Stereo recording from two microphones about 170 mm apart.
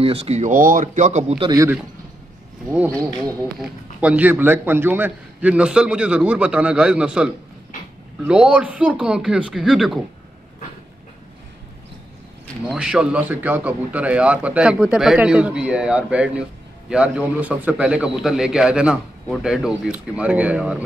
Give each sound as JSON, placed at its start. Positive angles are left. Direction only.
{"t": 0.0, "sound": "speech", "side_deg": -35}
{"t": 1.4, "sound": "a man's voice", "side_deg": -20}
{"t": 3.3, "sound": "speech", "side_deg": 0}
{"t": 8.3, "sound": "a man's voice", "side_deg": -5}
{"t": 12.6, "sound": "a man's voice", "side_deg": -5}